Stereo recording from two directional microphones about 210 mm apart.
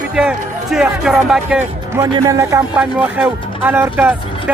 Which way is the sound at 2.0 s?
15° right (ahead or behind).